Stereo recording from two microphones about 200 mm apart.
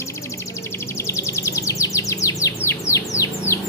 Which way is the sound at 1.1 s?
15° left (ahead or behind).